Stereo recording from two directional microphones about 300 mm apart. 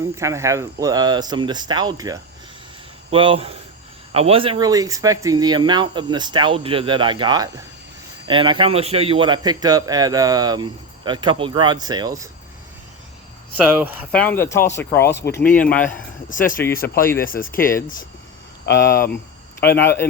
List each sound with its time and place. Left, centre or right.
0.2 s speech: centre
13.6 s speech: centre
15.2 s speech: left
15.5 s speech: centre
16.3 s speech: left
19.8 s speech: centre